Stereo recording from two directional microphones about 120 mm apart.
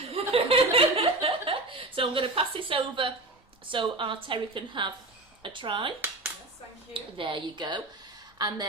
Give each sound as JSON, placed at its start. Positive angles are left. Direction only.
{"t": 0.1, "sound": "chuckle", "side_deg": -55}
{"t": 3.7, "sound": "a woman's voice", "side_deg": -45}
{"t": 6.9, "sound": "a woman's voice", "side_deg": -45}